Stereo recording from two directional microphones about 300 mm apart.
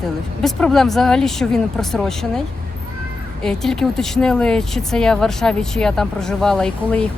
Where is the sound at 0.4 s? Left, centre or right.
Centre.